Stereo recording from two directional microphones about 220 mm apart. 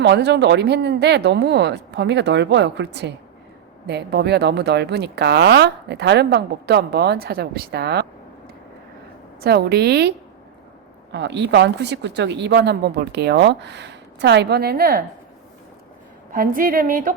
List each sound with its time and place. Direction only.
0.0 s speech: 50° right (ahead or behind)
9.4 s speech: 45° right (ahead or behind)
16.3 s a woman's voice: 40° right (ahead or behind)